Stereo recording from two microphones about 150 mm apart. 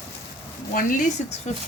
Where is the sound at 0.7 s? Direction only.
65° left (ahead or behind).